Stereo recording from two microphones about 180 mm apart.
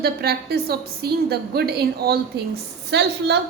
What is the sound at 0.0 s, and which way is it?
A woman's voice, 60° right (ahead or behind).